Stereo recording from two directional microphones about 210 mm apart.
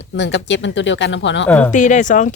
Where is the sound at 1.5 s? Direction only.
5° left (ahead or behind).